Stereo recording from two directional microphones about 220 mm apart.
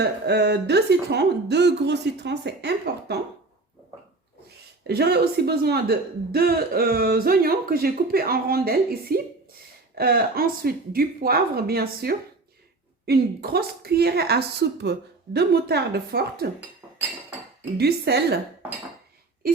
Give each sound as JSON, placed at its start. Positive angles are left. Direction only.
{"t": 0.0, "sound": "speech", "side_deg": -50}
{"t": 4.8, "sound": "speech", "side_deg": -45}
{"t": 17.7, "sound": "speech", "side_deg": -45}